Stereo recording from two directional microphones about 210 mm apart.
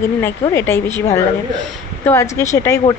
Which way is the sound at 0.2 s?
10° left (ahead or behind).